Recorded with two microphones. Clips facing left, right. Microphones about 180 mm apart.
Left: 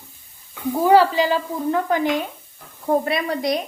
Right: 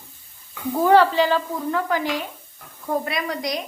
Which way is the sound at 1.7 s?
25° left (ahead or behind).